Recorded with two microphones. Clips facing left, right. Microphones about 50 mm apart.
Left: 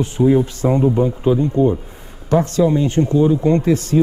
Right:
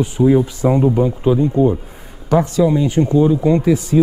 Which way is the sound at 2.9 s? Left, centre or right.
Centre.